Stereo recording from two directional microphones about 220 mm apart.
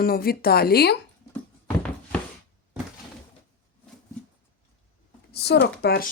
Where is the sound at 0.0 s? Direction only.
40° left (ahead or behind).